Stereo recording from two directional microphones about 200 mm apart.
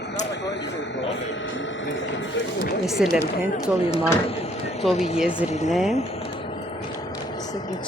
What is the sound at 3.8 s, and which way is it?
Speech, 30° left (ahead or behind).